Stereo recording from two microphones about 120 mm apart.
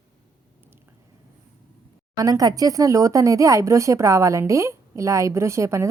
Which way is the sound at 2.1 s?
30° right (ahead or behind).